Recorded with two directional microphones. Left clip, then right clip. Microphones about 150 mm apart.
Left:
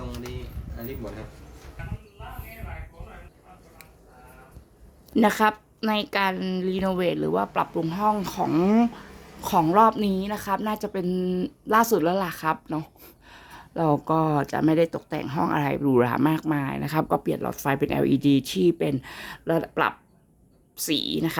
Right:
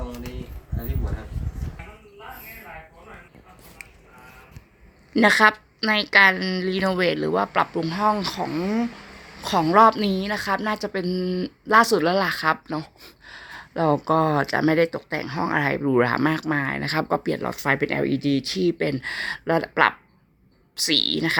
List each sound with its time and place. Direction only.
5.1 s a woman's voice: centre (ahead or behind)
8.5 s speech: 35° left (ahead or behind)
9.4 s a woman's voice: 5° left (ahead or behind)
15.5 s speech: centre (ahead or behind)
18.0 s speech: 20° left (ahead or behind)
18.9 s a woman's voice: 5° left (ahead or behind)